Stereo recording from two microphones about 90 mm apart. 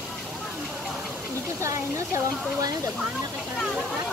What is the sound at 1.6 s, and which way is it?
Speech, 35° right (ahead or behind).